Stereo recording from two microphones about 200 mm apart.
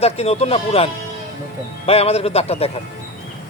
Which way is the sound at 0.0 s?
30° left (ahead or behind).